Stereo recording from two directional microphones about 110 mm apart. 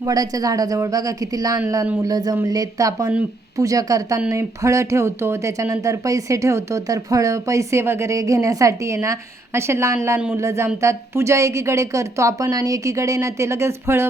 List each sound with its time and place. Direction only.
0.0 s speech: 35° right (ahead or behind)